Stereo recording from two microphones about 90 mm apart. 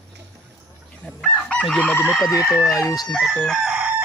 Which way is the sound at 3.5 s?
10° right (ahead or behind).